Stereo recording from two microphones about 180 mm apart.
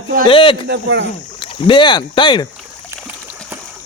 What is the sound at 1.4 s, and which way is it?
Speech, 30° left (ahead or behind).